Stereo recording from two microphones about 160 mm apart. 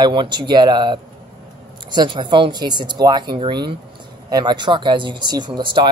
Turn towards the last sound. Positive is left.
turn(degrees=-30)  # may be behind; listen again after turning